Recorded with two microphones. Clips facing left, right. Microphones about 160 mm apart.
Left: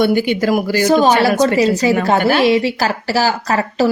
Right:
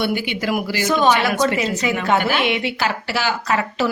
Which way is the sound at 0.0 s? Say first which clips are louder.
Left 8 dB; 45° left (ahead or behind).